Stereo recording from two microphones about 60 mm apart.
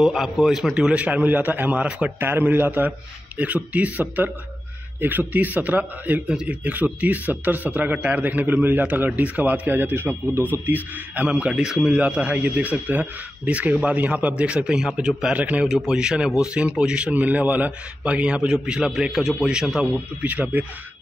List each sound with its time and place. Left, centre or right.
0.0 s a man's voice: centre
0.7 s a man's voice: centre
2.1 s a man's voice: right
6.2 s a man's voice: centre
11.2 s a man's voice: centre
15.3 s a man's voice: right
15.9 s a man's voice: centre
20.2 s a man's voice: right